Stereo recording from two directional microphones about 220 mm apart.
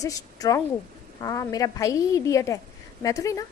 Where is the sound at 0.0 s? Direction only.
15° left (ahead or behind).